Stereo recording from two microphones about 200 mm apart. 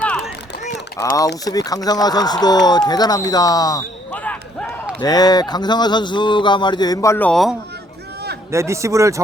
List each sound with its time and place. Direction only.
0.9 s speech: 15° left (ahead or behind)
4.1 s basketball bounce: 5° left (ahead or behind)
4.9 s speech: 20° left (ahead or behind); by 7.5 s 5° left (ahead or behind)
8.4 s a man's voice: 15° right (ahead or behind)